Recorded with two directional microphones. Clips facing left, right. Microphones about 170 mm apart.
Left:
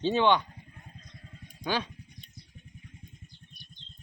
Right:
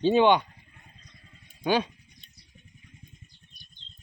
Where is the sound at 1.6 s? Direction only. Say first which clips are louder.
Right 6 dB; 15° right (ahead or behind).